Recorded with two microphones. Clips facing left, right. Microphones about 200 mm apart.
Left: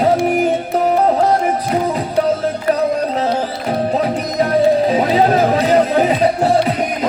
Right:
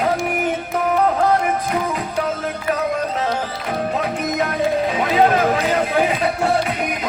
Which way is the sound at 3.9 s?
35° left (ahead or behind).